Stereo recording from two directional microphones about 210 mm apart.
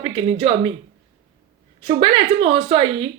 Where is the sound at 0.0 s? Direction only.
30° right (ahead or behind).